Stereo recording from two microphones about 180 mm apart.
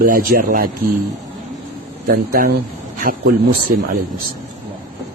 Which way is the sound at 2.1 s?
55° right (ahead or behind).